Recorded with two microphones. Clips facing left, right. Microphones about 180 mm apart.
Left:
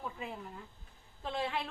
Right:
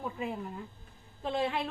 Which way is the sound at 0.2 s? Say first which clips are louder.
Right 7 dB; 15° right (ahead or behind).